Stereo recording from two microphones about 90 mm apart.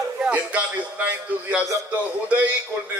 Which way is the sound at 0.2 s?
15° right (ahead or behind).